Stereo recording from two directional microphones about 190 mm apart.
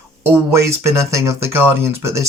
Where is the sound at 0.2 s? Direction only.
10° right (ahead or behind).